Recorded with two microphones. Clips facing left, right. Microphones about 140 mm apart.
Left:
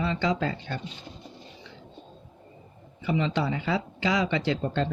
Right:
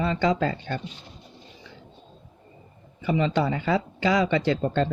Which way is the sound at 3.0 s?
50° right (ahead or behind).